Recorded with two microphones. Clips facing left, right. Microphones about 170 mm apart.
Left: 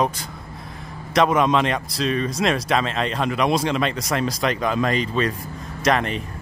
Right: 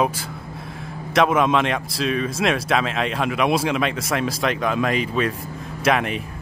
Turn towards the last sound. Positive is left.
turn(degrees=-5)  # may be behind; listen again after turning